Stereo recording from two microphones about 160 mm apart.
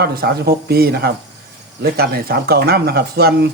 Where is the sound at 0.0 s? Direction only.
80° right.